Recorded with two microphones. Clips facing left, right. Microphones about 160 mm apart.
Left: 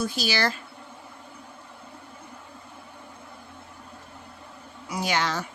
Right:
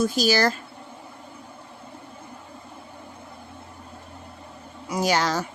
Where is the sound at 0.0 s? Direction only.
45° right (ahead or behind).